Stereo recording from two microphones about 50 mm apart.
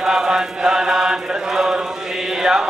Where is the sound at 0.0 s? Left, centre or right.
Centre.